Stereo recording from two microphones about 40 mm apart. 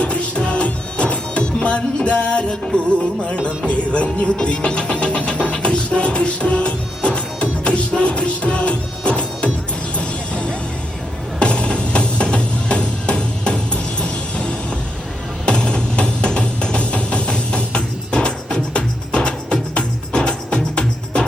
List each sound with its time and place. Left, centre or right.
0.0 s music: left
11.3 s music: left